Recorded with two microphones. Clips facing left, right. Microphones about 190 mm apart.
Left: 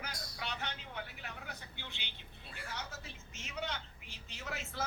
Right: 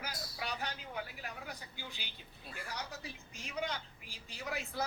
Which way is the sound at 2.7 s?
Centre (ahead or behind).